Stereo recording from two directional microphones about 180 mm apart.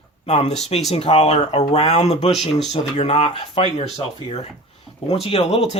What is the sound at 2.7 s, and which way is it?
Speech, 40° left (ahead or behind).